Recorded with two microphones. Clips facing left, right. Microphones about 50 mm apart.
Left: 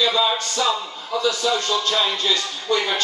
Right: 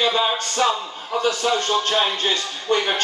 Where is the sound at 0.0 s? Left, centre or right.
Right.